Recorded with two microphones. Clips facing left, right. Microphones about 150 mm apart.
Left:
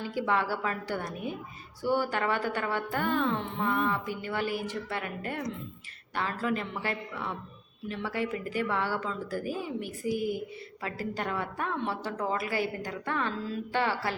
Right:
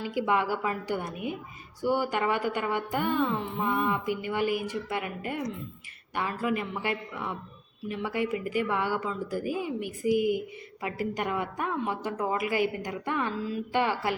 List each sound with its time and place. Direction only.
0.0 s a woman's voice: 15° right (ahead or behind)